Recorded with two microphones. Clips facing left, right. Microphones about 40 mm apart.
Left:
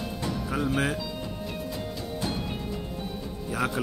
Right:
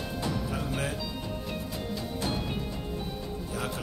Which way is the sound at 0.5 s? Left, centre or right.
Left.